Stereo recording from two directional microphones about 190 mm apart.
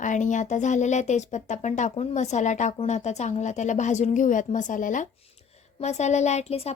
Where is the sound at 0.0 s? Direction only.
40° left (ahead or behind).